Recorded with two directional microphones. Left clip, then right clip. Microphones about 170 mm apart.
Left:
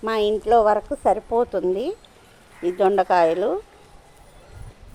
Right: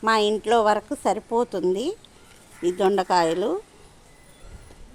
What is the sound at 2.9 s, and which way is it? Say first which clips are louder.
Speech: left 3 dB; 90° right.